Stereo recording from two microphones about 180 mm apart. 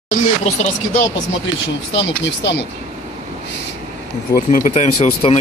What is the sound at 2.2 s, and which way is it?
Speech, 70° left (ahead or behind).